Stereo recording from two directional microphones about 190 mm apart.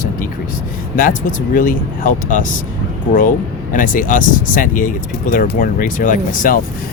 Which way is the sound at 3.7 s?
45° left (ahead or behind).